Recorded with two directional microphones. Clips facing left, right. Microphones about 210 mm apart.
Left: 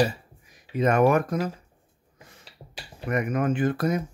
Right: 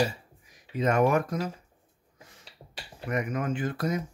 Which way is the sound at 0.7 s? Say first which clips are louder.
Left 3 dB; 60° left (ahead or behind).